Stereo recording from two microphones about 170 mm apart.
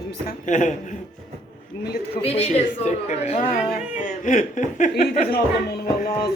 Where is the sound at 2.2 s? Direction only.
35° left (ahead or behind).